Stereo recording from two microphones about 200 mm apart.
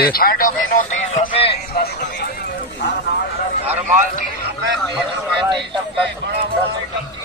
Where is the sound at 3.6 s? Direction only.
40° right (ahead or behind).